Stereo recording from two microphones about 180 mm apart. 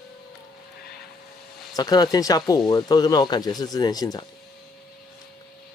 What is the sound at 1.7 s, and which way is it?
Speech, 20° left (ahead or behind).